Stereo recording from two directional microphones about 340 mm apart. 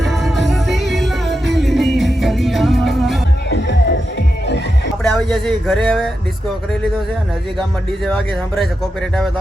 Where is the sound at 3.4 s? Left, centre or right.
Left.